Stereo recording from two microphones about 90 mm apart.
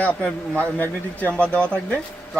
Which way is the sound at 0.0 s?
20° left (ahead or behind).